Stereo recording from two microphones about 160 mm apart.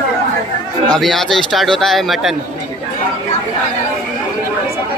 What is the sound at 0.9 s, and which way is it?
Speech, centre (ahead or behind).